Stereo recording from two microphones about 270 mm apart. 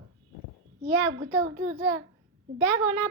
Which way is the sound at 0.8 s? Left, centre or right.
Right.